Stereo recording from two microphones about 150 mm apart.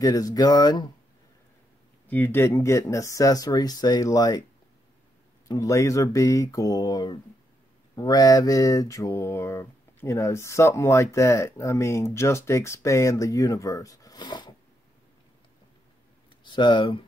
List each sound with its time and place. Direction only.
0.0 s mantra: 25° left (ahead or behind)
2.0 s mantra: 10° left (ahead or behind)
5.5 s mantra: 20° left (ahead or behind)
16.4 s speech: 30° left (ahead or behind)